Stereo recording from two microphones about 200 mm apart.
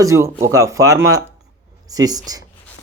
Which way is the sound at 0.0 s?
15° right (ahead or behind).